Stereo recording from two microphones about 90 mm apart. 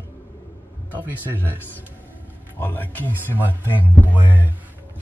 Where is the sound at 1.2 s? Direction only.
20° right (ahead or behind).